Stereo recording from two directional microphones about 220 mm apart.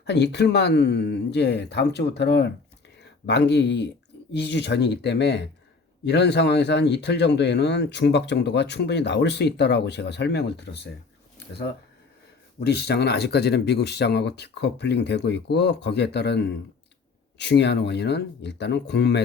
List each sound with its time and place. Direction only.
0.0 s speech: 50° left (ahead or behind)
12.5 s speech: 50° left (ahead or behind)